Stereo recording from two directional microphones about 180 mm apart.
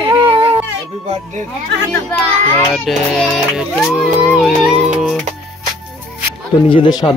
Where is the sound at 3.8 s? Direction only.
5° right (ahead or behind).